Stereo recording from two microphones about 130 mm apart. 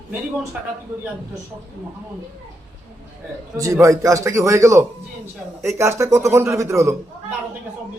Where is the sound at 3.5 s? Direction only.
25° right (ahead or behind).